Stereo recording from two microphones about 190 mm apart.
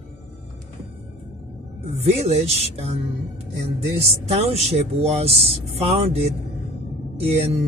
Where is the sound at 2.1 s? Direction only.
35° right (ahead or behind).